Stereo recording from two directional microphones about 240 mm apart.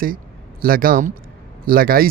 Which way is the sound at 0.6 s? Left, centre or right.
Right.